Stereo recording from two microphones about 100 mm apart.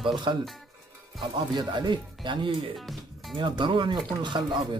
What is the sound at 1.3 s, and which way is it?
Speech, 50° right (ahead or behind).